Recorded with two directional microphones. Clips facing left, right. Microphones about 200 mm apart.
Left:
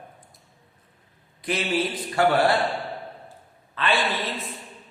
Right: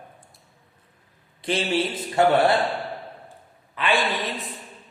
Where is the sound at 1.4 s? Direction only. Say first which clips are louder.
Right 1 dB; 30° right (ahead or behind).